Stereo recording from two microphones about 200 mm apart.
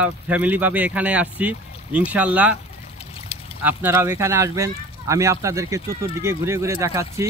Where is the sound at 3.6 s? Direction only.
10° right (ahead or behind).